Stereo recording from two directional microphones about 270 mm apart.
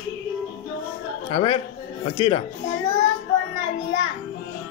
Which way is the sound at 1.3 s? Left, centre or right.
Left.